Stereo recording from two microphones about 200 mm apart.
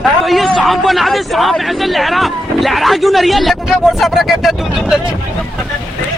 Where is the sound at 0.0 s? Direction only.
Centre (ahead or behind).